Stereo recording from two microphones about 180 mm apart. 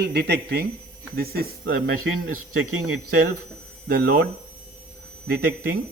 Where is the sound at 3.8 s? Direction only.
65° right (ahead or behind).